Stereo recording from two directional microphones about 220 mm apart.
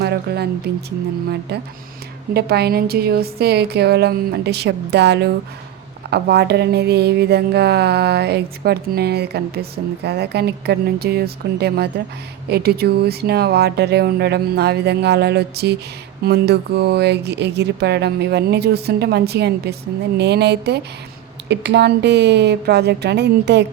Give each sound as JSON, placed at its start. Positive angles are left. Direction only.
{"t": 0.0, "sound": "speech", "side_deg": -50}